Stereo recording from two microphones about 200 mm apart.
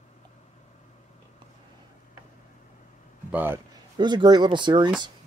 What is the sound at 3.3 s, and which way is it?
Speech, 10° right (ahead or behind).